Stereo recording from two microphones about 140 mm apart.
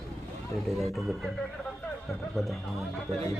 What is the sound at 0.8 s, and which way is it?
Speech, centre (ahead or behind).